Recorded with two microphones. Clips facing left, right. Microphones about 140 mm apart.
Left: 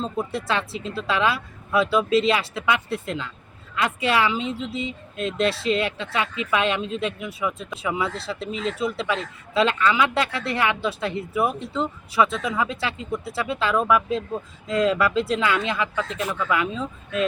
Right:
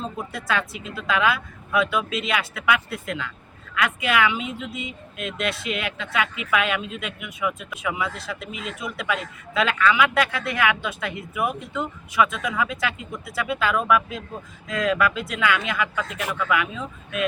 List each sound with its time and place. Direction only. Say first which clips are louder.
0.0 s speech: left 4 dB; 30° left (ahead or behind)